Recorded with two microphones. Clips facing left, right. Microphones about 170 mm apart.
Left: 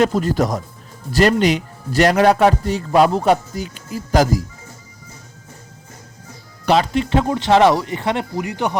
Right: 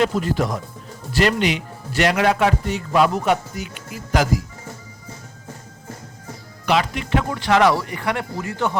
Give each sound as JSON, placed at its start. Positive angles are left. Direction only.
{"t": 0.0, "sound": "a man's voice", "side_deg": 40}
{"t": 6.7, "sound": "speech", "side_deg": 35}